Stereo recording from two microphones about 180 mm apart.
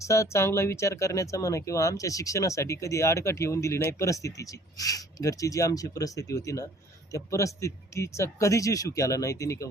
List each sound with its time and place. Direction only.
0.0 s speech: 15° left (ahead or behind)